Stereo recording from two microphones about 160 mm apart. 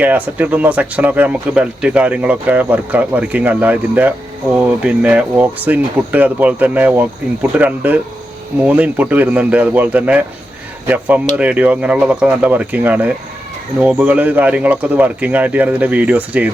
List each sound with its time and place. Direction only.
0.0 s speech: 10° right (ahead or behind)